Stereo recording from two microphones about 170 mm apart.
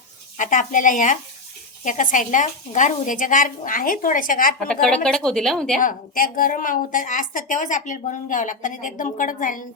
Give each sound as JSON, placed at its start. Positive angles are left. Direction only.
{"t": 0.3, "sound": "a woman's voice", "side_deg": 50}
{"t": 4.7, "sound": "a woman's voice", "side_deg": 5}
{"t": 5.8, "sound": "a woman's voice", "side_deg": 55}